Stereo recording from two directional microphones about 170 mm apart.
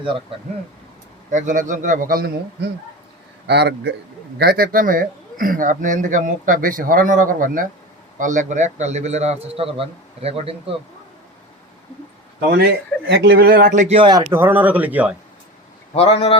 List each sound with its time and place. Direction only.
0.0 s a man's voice: 30° right (ahead or behind)
1.3 s a man's voice: 50° right (ahead or behind)
3.4 s a man's voice: 80° right
4.4 s a man's voice: 60° right (ahead or behind); by 10.8 s 35° right (ahead or behind)
12.4 s speech: 70° right (ahead or behind); by 13.9 s 50° right (ahead or behind)
13.9 s speech: 25° right (ahead or behind)
14.3 s a man's voice: 10° right (ahead or behind)
16.0 s speech: 35° left (ahead or behind)